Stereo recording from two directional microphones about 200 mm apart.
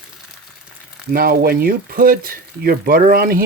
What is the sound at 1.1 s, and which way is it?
Speech, 45° right (ahead or behind).